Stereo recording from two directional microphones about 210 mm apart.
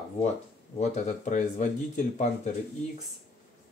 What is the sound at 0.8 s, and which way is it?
Speech, 35° left (ahead or behind).